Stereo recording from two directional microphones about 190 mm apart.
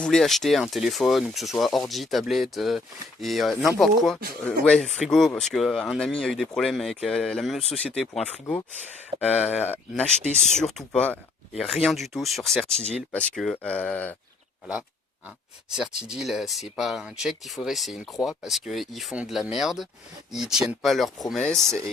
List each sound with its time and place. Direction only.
0.0 s speech: centre (ahead or behind)
9.1 s speech: 20° right (ahead or behind)
9.6 s speech: 5° left (ahead or behind)
10.2 s speech: 35° left (ahead or behind)
10.6 s speech: centre (ahead or behind)
15.7 s speech: 5° right (ahead or behind)